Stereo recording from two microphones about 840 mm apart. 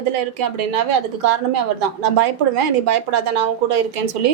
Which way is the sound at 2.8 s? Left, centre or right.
Right.